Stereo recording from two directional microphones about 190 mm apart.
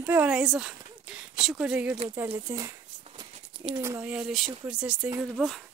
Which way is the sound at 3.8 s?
10° right (ahead or behind).